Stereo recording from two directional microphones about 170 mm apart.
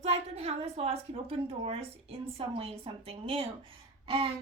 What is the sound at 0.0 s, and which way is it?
A woman's voice, 35° right (ahead or behind).